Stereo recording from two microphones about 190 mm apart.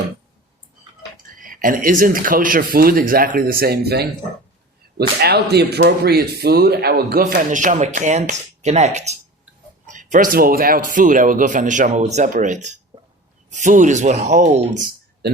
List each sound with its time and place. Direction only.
1.1 s a man's voice: 45° right (ahead or behind)